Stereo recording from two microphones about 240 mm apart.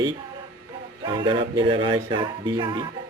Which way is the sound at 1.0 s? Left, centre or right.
Right.